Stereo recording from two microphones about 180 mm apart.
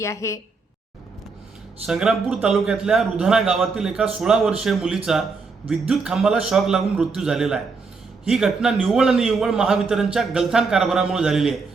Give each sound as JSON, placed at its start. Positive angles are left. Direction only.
{"t": 0.0, "sound": "a woman's voice", "side_deg": 15}
{"t": 1.9, "sound": "a man's voice", "side_deg": -5}